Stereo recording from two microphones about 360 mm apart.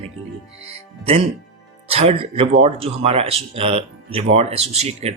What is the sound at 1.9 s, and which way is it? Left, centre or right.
Speech, centre.